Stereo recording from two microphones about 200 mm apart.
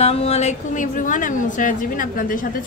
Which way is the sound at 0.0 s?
30° left (ahead or behind).